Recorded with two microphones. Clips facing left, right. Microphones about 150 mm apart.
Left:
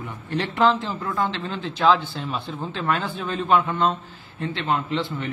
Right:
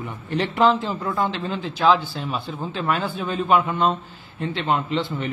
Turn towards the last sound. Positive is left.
turn(degrees=-20)  # may be behind; listen again after turning